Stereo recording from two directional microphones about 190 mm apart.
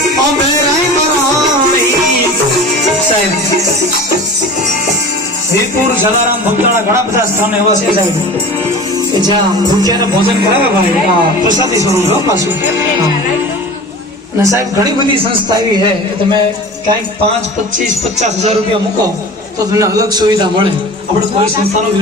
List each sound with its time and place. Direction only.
19.7 s a man's voice: 15° right (ahead or behind)